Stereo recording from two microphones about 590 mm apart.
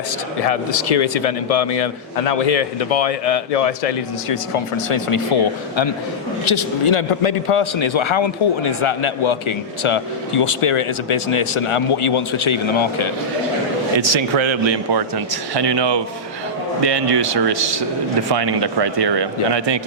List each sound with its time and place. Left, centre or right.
0.4 s a man's voice: left
6.4 s a man's voice: left
14.0 s speech: right